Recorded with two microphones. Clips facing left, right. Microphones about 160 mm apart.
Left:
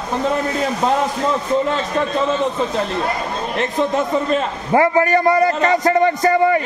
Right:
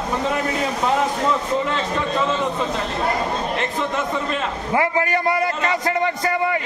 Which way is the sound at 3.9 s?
40° left (ahead or behind).